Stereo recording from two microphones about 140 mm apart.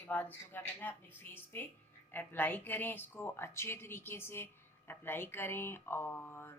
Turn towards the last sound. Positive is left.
turn(degrees=15)  # may be behind; listen again after turning